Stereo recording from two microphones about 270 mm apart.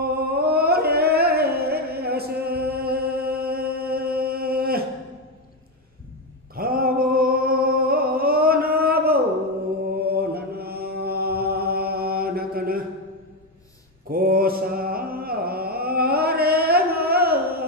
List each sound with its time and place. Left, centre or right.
0.0 s music: right
6.5 s a sound: right
9.9 s chant: right
14.1 s music: right